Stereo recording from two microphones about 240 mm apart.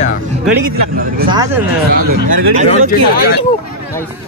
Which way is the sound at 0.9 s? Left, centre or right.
Right.